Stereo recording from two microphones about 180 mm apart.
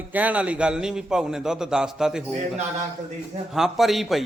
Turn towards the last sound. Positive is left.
turn(degrees=0)  # may be behind; listen again after turning